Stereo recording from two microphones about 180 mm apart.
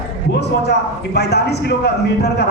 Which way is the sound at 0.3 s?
70° left (ahead or behind).